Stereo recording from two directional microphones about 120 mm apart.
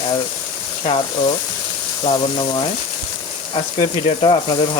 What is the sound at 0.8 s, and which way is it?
Speech, 50° left (ahead or behind).